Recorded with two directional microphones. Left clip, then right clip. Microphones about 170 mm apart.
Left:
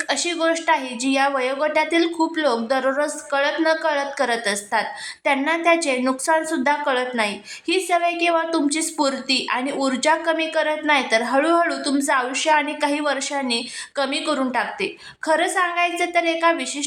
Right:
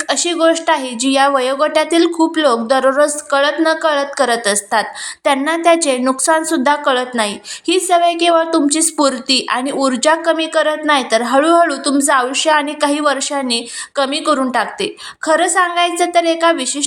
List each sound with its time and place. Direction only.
0.1 s a woman's voice: 20° right (ahead or behind)